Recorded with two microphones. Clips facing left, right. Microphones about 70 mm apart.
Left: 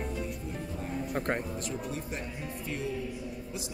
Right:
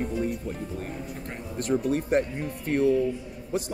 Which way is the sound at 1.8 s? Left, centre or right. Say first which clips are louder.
Right 13 dB; right.